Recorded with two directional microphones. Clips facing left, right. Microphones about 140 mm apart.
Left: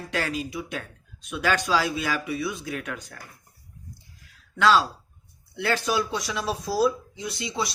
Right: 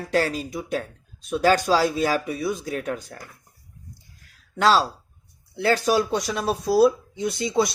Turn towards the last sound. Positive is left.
turn(degrees=-50)  # may be behind; listen again after turning